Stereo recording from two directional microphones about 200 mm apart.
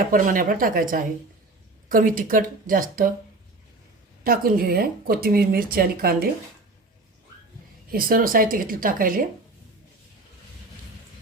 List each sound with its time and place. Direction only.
0.1 s speech: 45° right (ahead or behind)
4.2 s speech: 45° right (ahead or behind)
7.9 s speech: 45° right (ahead or behind)